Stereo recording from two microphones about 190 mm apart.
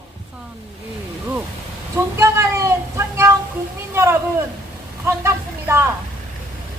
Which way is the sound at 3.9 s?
15° right (ahead or behind).